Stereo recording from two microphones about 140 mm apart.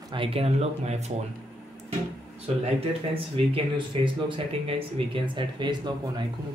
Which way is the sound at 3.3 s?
35° right (ahead or behind).